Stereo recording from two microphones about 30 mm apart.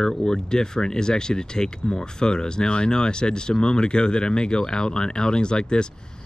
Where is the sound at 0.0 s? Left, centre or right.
Centre.